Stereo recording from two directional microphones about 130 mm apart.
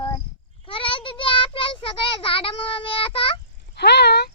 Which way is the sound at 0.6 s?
45° left (ahead or behind).